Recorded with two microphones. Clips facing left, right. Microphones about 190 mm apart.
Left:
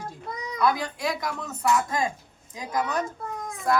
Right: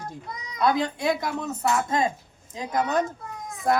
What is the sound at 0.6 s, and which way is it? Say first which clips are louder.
Speech: right 2 dB; 25° right (ahead or behind).